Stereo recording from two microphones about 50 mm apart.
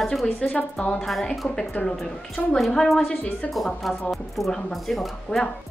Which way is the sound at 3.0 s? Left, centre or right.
Left.